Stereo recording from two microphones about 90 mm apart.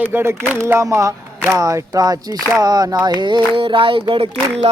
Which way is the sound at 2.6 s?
45° right (ahead or behind).